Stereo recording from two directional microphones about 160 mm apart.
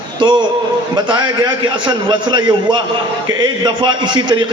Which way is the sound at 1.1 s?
30° right (ahead or behind).